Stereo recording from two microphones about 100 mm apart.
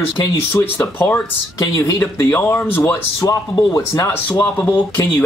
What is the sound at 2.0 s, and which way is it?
Speech, 20° left (ahead or behind).